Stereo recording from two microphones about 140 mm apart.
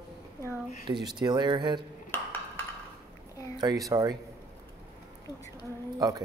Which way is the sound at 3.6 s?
25° right (ahead or behind).